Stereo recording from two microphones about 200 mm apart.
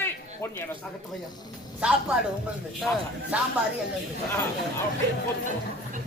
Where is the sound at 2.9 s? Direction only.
10° left (ahead or behind).